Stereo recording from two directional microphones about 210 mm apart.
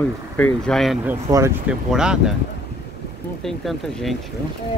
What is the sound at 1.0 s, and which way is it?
Speech, 10° right (ahead or behind).